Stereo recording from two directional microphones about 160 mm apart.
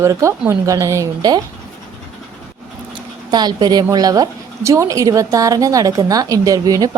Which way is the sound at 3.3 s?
25° right (ahead or behind).